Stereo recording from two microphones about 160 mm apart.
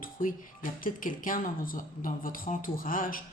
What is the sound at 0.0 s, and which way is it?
Speech, 60° left (ahead or behind).